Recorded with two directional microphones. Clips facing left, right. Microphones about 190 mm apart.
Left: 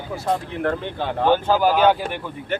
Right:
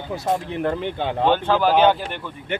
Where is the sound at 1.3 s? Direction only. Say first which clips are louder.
Left 1 dB; 10° left (ahead or behind).